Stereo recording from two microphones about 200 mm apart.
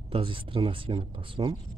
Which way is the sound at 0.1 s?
25° right (ahead or behind).